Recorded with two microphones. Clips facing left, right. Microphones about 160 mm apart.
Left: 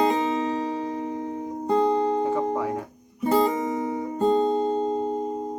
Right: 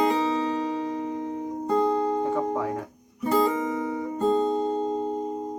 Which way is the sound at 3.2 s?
25° left (ahead or behind).